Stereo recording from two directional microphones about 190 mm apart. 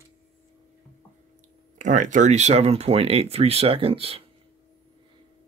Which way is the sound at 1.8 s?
40° right (ahead or behind).